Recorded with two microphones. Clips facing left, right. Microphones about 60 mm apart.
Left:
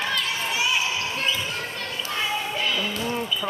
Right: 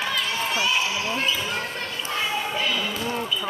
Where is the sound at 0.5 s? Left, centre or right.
Centre.